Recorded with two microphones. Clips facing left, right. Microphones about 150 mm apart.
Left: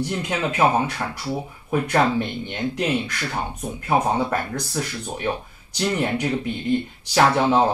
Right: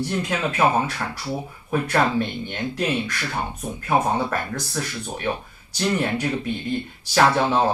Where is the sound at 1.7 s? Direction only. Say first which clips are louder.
Left 1 dB; 15° left (ahead or behind).